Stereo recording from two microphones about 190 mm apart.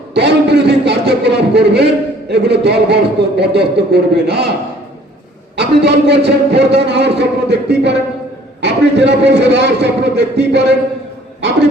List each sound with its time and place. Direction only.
0.1 s a sound: 65° right (ahead or behind)
2.3 s a man's voice: 60° right (ahead or behind)
5.5 s a man's voice: 65° right (ahead or behind)